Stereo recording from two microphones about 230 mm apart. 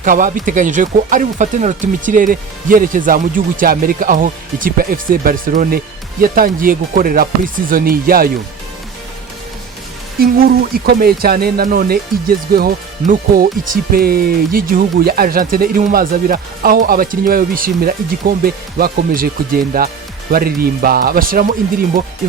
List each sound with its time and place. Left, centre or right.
0.0 s speech: right
10.2 s speech: right